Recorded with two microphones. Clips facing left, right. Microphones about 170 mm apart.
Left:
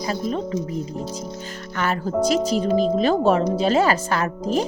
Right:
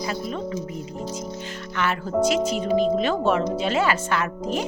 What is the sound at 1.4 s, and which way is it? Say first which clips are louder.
Speech: left 1 dB; 40° left (ahead or behind).